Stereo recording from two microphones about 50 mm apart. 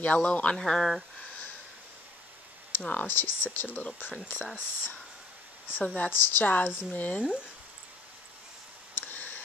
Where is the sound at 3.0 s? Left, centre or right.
Left.